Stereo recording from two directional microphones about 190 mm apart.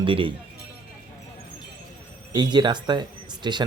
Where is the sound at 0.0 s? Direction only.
25° right (ahead or behind).